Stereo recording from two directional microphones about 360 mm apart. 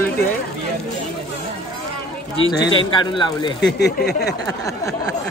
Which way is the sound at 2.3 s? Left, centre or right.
Left.